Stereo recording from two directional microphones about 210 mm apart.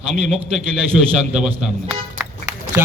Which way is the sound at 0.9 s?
5° right (ahead or behind).